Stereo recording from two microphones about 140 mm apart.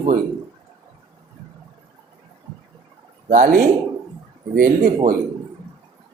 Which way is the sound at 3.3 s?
70° right (ahead or behind).